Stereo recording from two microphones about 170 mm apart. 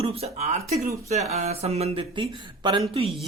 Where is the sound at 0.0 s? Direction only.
35° right (ahead or behind).